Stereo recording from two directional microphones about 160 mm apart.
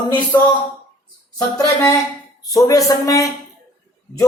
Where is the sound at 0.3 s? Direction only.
10° left (ahead or behind).